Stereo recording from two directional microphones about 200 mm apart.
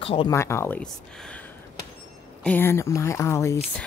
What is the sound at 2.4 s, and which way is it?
Speech, 10° left (ahead or behind).